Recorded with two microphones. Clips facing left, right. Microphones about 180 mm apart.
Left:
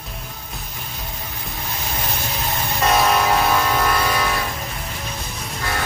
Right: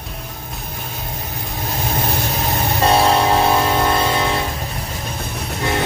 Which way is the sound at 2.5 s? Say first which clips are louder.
Right 3 dB; 30° right (ahead or behind).